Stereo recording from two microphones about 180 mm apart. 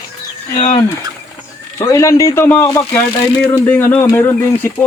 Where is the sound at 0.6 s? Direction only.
40° left (ahead or behind).